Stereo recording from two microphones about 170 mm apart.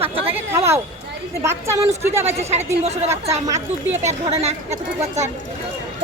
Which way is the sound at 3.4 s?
20° right (ahead or behind).